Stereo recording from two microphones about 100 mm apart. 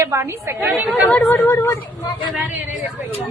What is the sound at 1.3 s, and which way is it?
Speech, 20° left (ahead or behind).